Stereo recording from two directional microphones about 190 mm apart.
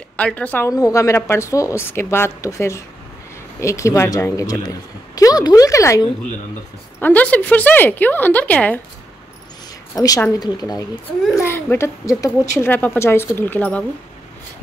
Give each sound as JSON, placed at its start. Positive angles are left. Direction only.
{"t": 0.2, "sound": "speech", "side_deg": 5}
{"t": 9.9, "sound": "speech", "side_deg": 20}